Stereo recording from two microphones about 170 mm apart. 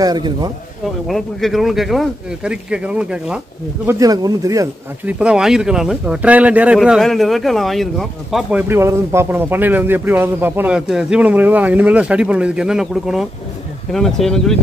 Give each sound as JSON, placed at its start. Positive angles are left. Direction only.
{"t": 0.0, "sound": "speech", "side_deg": -25}
{"t": 1.0, "sound": "speech", "side_deg": 0}
{"t": 3.8, "sound": "speech", "side_deg": -20}
{"t": 5.2, "sound": "a man's voice", "side_deg": -5}